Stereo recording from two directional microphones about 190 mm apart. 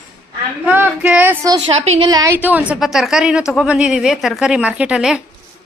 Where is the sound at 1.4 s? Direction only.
20° right (ahead or behind).